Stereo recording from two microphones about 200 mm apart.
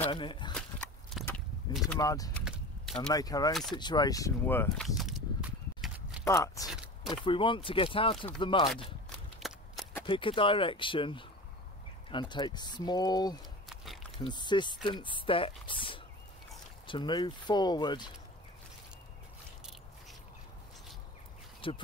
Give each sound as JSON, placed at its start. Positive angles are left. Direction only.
{"t": 0.1, "sound": "speech", "side_deg": 25}
{"t": 0.6, "sound": "a sound", "side_deg": 5}
{"t": 2.0, "sound": "speech", "side_deg": 15}
{"t": 2.4, "sound": "typing", "side_deg": 0}
{"t": 3.1, "sound": "speech", "side_deg": 20}
{"t": 4.8, "sound": "a sound", "side_deg": 0}
{"t": 6.2, "sound": "speech", "side_deg": 15}
{"t": 9.4, "sound": "a sound", "side_deg": 0}
{"t": 10.0, "sound": "speech", "side_deg": 25}
{"t": 21.5, "sound": "speech", "side_deg": 25}